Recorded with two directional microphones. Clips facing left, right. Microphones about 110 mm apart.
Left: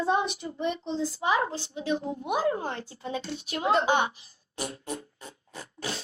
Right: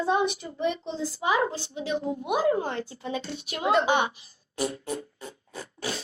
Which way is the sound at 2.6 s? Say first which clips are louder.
Right 3 dB; 35° left (ahead or behind).